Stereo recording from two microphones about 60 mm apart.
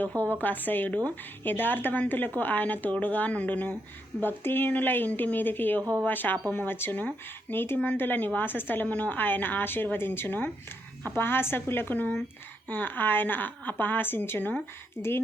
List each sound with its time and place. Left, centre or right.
0.2 s a woman's voice: left